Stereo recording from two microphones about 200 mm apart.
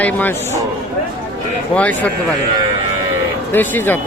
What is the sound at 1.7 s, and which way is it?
Speech, 5° left (ahead or behind).